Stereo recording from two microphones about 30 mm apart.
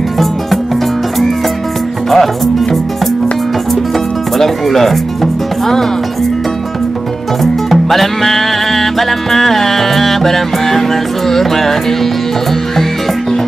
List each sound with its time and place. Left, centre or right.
2.0 s music: centre
4.4 s speech: centre
7.7 s music: centre